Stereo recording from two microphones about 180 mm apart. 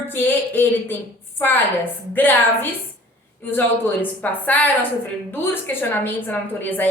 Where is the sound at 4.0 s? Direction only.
10° left (ahead or behind).